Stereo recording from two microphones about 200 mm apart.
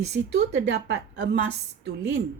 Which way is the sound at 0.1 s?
60° right (ahead or behind).